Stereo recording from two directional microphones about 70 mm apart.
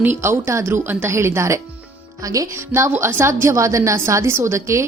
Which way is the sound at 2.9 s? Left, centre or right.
Right.